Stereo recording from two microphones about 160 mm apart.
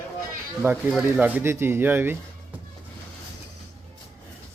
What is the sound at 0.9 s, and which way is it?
Speech, centre (ahead or behind).